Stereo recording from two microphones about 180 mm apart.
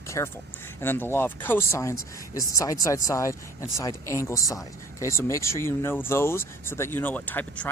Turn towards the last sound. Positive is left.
turn(degrees=10)  # may be behind; listen again after turning